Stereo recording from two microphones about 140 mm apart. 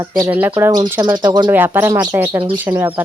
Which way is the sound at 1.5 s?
15° right (ahead or behind).